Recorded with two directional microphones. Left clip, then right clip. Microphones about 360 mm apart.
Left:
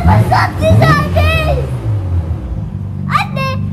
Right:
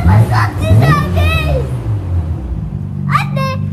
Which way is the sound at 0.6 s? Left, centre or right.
Centre.